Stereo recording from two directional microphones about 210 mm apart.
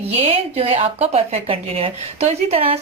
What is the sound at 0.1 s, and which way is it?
A woman's voice, 25° right (ahead or behind).